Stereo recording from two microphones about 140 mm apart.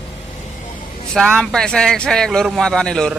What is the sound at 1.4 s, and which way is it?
A man's voice, 5° left (ahead or behind).